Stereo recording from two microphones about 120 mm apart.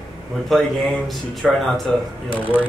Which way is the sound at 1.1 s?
Centre (ahead or behind).